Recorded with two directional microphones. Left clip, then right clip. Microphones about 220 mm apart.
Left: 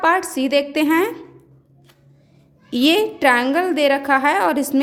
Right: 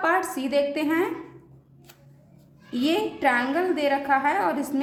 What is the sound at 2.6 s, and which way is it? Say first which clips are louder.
A woman's voice: left 8 dB; 45° left (ahead or behind).